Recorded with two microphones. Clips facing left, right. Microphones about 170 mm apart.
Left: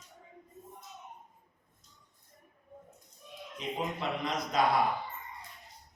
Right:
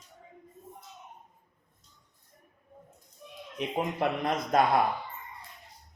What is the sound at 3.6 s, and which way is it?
A man's voice, 55° right (ahead or behind).